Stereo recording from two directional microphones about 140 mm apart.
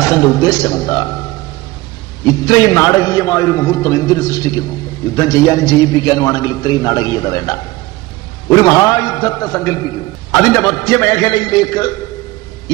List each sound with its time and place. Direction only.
0.0 s a man's voice: 25° left (ahead or behind)
2.2 s a man's voice: 25° left (ahead or behind)